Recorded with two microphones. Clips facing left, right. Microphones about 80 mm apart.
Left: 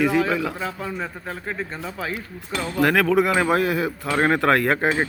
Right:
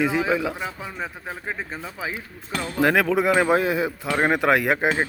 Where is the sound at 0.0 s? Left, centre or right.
Centre.